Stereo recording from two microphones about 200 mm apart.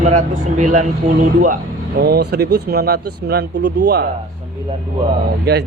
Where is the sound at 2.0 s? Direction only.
55° right (ahead or behind).